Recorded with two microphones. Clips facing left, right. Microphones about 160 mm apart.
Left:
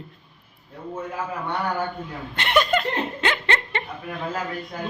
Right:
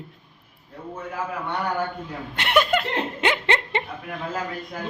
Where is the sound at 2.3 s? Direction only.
10° right (ahead or behind).